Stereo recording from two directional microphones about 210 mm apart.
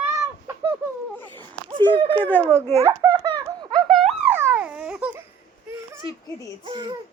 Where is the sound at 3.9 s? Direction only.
Centre (ahead or behind).